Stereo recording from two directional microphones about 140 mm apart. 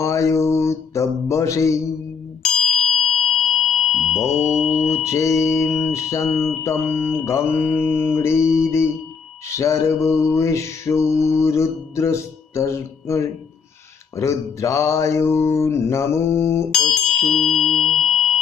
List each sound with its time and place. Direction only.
0.0 s mantra: 20° left (ahead or behind)
2.4 s ding: centre (ahead or behind)
4.3 s mantra: 50° left (ahead or behind)
5.0 s mantra: 20° left (ahead or behind)
5.8 s music: 20° left (ahead or behind)
6.3 s mantra: 20° left (ahead or behind)
9.5 s mantra: 20° left (ahead or behind)
16.7 s tuning fork: 5° left (ahead or behind)